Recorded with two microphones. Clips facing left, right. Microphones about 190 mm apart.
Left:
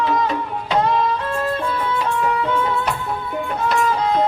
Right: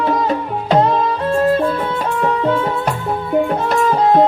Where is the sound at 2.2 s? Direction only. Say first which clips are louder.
Right 7 dB; 40° right (ahead or behind).